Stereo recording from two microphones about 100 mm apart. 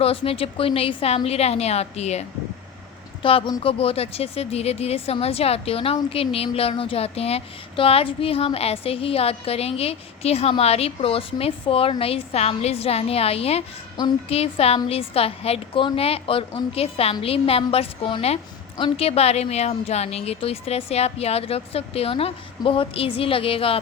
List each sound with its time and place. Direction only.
0.0 s speech: 70° left (ahead or behind); by 2.2 s 90° left
3.2 s a woman's voice: 60° left (ahead or behind)